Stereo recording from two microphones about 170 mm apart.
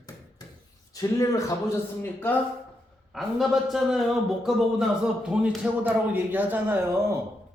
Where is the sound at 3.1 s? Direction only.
Centre (ahead or behind).